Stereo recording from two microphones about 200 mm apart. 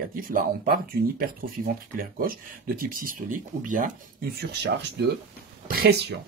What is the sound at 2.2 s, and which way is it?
Speech, 45° right (ahead or behind).